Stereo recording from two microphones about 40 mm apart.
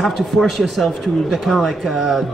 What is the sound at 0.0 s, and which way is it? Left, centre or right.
Speech, centre.